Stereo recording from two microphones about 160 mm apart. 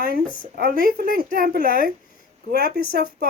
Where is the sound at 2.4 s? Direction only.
75° right (ahead or behind).